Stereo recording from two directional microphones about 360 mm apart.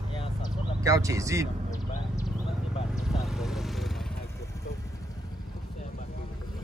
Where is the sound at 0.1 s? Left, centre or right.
Centre.